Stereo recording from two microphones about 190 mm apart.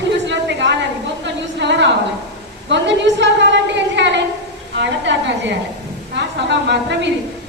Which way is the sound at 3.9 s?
70° right (ahead or behind).